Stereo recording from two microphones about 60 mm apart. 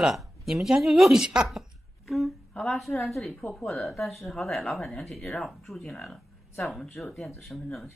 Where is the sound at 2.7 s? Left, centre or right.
Centre.